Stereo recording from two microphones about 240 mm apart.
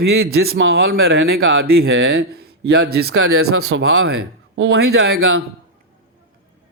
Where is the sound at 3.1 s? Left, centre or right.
Right.